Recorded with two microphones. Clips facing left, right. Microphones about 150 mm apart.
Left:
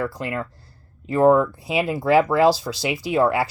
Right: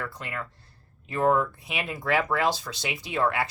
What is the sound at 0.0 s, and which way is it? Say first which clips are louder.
Speech: left 9 dB; 35° left (ahead or behind).